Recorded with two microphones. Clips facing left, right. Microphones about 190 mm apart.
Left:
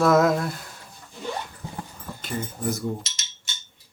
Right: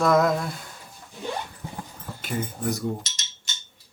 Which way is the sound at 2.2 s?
Centre (ahead or behind).